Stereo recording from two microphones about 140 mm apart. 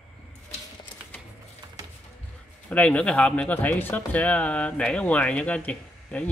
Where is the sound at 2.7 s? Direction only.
10° left (ahead or behind).